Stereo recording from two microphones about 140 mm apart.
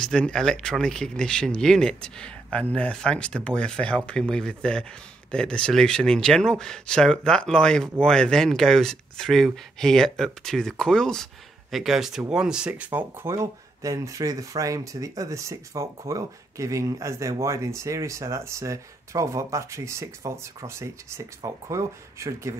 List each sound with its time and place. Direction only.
0.0 s speech: 5° left (ahead or behind); by 22.6 s 20° right (ahead or behind)